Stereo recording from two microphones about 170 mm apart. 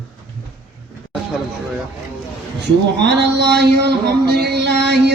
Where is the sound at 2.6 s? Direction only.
80° right.